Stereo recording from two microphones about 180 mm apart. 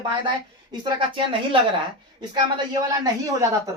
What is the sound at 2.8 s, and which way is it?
Speech, 20° right (ahead or behind).